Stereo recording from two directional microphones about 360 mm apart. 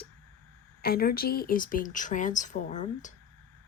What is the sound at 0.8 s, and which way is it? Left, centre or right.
Speech, left.